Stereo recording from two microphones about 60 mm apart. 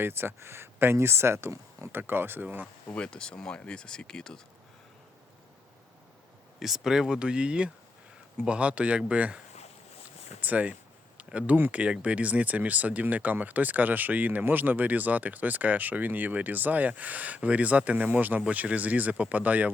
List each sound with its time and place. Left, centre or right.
0.0 s speech: right
2.9 s speech: centre
6.6 s speech: centre; by 9.4 s right
10.4 s speech: right
11.2 s a sound: right
11.5 s speech: right